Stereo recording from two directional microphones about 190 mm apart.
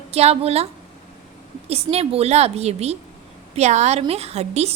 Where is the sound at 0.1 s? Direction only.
35° right (ahead or behind).